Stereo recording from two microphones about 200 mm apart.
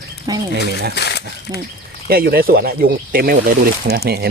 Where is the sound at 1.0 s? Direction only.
55° left (ahead or behind).